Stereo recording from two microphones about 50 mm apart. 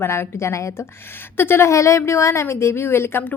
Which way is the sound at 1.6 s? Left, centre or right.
Left.